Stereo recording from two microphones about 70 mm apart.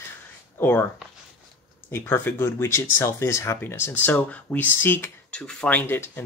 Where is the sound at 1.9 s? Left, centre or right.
Left.